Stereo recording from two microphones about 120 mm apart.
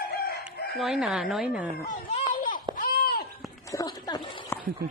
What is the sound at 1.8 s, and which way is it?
Speech, 85° left.